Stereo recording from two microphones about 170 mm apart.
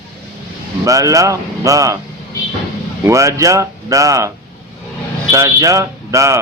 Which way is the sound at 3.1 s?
20° right (ahead or behind).